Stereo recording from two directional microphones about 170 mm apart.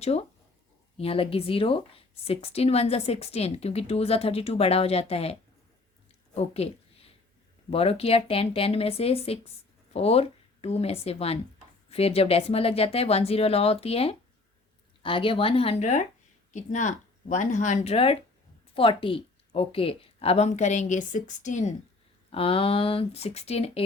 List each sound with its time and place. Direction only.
0.0 s speech: 40° left (ahead or behind)
6.3 s a sound: 35° left (ahead or behind)
7.7 s a woman's voice: 35° left (ahead or behind)
22.3 s speech: 35° left (ahead or behind)